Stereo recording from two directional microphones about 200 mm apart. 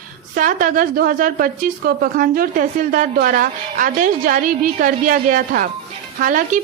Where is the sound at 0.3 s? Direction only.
40° right (ahead or behind).